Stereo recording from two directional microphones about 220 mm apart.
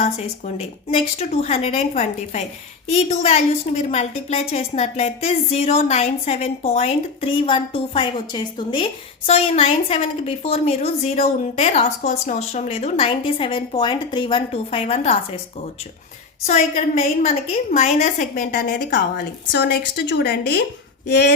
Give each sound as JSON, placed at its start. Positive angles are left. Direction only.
{"t": 0.0, "sound": "a woman's voice", "side_deg": 30}
{"t": 16.5, "sound": "a woman's voice", "side_deg": 30}
{"t": 21.1, "sound": "a sound", "side_deg": 50}